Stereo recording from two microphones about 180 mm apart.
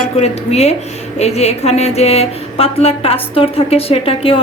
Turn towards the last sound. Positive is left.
turn(degrees=30)  # may be behind; listen again after turning